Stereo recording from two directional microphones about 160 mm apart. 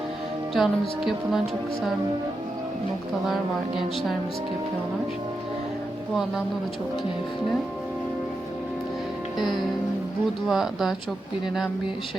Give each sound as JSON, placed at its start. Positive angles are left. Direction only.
{"t": 0.5, "sound": "speech", "side_deg": 0}
{"t": 10.5, "sound": "speech", "side_deg": 0}